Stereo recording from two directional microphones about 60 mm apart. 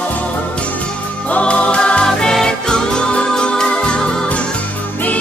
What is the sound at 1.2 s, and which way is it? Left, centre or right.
Music, left.